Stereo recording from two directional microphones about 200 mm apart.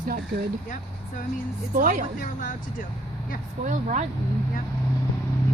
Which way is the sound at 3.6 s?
40° right (ahead or behind).